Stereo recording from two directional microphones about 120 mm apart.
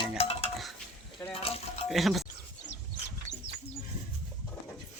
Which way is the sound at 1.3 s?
55° left (ahead or behind).